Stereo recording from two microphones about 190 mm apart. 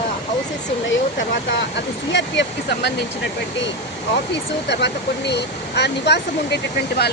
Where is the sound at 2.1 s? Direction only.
65° left (ahead or behind).